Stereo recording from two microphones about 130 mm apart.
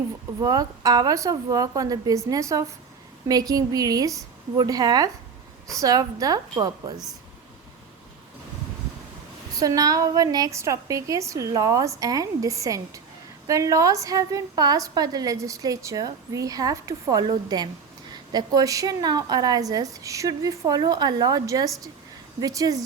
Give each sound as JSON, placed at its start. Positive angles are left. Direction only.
{"t": 0.4, "sound": "a woman's voice", "side_deg": -30}
{"t": 9.6, "sound": "a woman's voice", "side_deg": -30}